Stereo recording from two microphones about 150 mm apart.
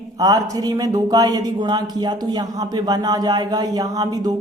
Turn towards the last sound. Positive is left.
turn(degrees=-25)  # may be behind; listen again after turning